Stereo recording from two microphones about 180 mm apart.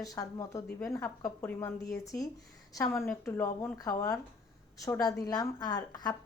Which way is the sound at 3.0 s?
5° left (ahead or behind).